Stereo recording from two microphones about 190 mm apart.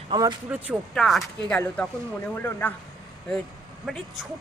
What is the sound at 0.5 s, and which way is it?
Speech, 5° right (ahead or behind).